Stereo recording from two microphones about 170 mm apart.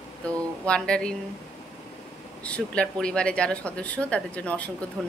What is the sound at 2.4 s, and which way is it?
Speech, 5° left (ahead or behind).